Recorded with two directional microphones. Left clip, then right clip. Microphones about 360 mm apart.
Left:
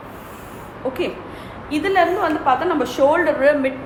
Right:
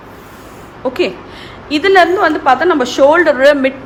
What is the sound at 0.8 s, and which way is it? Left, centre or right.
A woman's voice, right.